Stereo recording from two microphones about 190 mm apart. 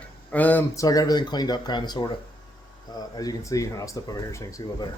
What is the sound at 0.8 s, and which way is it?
Speech, 20° left (ahead or behind).